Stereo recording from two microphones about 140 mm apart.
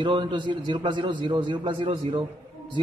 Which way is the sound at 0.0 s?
35° right (ahead or behind).